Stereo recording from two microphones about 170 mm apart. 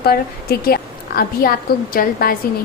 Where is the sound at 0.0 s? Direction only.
65° left (ahead or behind).